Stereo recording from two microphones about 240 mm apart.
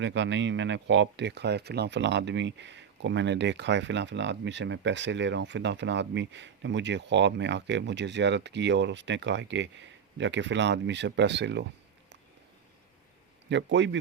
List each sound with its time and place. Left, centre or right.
0.0 s speech: right
13.5 s speech: right